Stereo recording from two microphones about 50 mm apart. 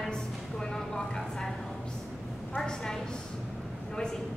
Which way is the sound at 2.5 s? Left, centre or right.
Centre.